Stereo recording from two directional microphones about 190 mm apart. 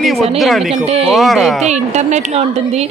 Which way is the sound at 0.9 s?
30° right (ahead or behind).